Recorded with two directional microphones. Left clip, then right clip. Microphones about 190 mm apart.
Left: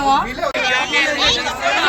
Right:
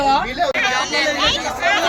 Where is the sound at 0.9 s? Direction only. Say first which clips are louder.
Left 2 dB; 70° right (ahead or behind).